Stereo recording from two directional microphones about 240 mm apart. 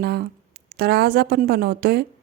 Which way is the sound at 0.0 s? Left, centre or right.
Right.